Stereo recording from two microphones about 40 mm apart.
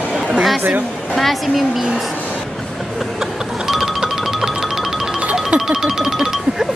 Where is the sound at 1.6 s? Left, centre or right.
Centre.